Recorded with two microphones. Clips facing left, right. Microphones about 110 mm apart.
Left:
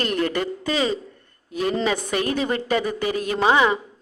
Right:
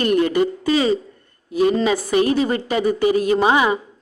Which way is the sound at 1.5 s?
10° right (ahead or behind).